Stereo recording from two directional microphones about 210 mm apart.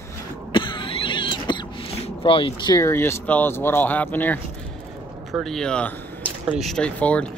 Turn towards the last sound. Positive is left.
turn(degrees=5)  # may be behind; listen again after turning